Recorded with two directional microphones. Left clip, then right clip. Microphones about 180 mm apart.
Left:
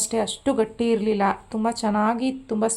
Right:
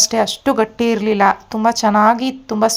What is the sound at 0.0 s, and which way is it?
Speech, 20° right (ahead or behind).